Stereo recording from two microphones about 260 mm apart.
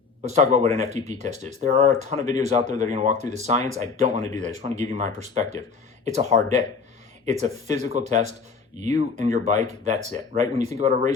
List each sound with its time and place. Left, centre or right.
0.2 s speech: right